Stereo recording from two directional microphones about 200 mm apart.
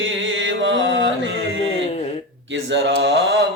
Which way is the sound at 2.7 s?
60° right (ahead or behind).